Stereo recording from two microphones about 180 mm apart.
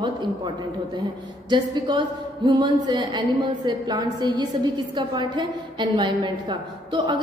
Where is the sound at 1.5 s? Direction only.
25° right (ahead or behind).